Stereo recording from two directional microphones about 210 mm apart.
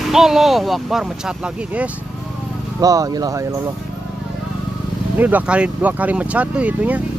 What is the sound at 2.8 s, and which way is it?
Speech, 15° right (ahead or behind).